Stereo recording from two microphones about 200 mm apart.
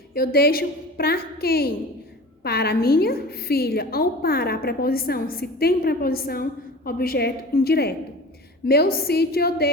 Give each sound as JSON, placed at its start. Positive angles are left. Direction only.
{"t": 0.1, "sound": "a woman's voice", "side_deg": 50}